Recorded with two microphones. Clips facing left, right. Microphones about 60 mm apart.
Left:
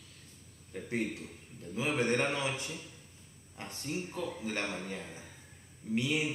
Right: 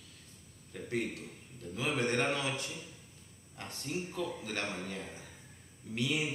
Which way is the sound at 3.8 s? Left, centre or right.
Centre.